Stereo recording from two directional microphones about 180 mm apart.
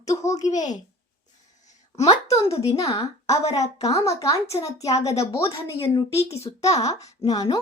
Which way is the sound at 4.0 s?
15° left (ahead or behind).